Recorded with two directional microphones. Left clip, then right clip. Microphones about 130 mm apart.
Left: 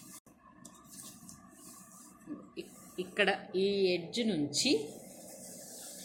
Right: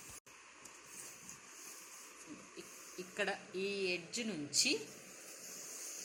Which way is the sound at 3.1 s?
Centre (ahead or behind).